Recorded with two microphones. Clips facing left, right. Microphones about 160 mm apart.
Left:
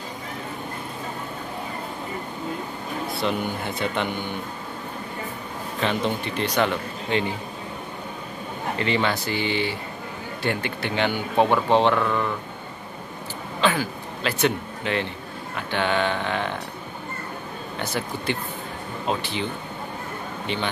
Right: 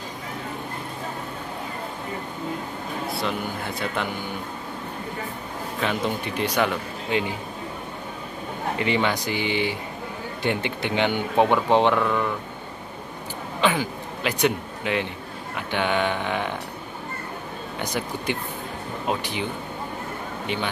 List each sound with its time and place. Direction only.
3.1 s speech: centre (ahead or behind)
5.8 s speech: 5° right (ahead or behind)
8.7 s speech: 15° right (ahead or behind)
13.6 s speech: 15° right (ahead or behind)
17.7 s speech: 15° right (ahead or behind)